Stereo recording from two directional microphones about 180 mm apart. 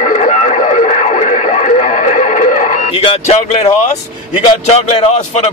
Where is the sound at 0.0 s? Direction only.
45° left (ahead or behind).